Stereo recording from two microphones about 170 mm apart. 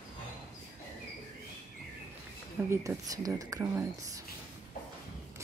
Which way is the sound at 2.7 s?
15° right (ahead or behind).